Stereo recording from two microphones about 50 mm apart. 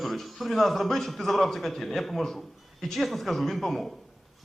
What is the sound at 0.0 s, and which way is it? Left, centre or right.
A man's voice, centre.